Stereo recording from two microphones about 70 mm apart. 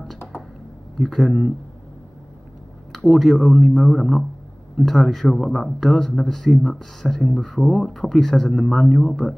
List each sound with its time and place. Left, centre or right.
0.9 s speech: centre
2.9 s speech: centre